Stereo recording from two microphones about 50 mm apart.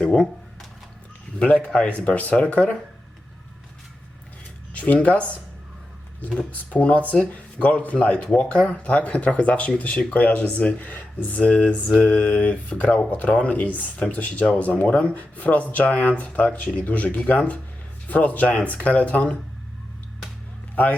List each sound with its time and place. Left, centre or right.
0.0 s speech: centre
1.4 s speech: left
4.7 s a sound: left
5.0 s speech: left
6.5 s speech: left